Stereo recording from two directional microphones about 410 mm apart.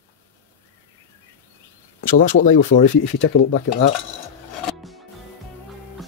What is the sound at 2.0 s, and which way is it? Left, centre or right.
Speech, centre.